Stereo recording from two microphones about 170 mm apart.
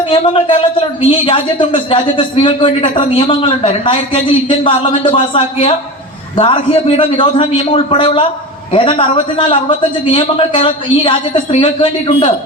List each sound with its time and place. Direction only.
0.1 s speech: 30° left (ahead or behind)